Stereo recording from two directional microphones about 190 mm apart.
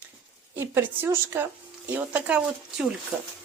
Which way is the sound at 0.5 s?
10° right (ahead or behind).